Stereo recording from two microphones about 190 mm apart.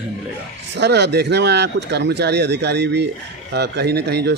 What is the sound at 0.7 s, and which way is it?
Speech, 65° right (ahead or behind).